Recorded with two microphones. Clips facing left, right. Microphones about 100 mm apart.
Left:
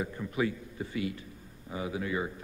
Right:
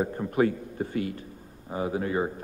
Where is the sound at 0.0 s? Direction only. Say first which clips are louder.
Right 7 dB; 45° right (ahead or behind).